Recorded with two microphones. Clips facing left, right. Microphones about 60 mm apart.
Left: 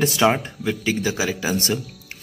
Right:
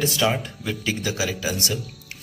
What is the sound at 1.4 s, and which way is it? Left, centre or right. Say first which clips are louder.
Speech: left 4 dB; left.